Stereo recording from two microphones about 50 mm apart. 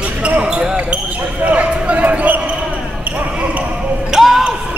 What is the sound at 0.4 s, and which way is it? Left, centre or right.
Basketball bounce, right.